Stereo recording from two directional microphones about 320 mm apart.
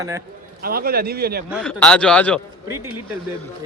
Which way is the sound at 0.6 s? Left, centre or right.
Right.